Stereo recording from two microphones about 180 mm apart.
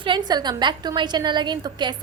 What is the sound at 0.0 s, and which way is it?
A woman's voice, 25° right (ahead or behind).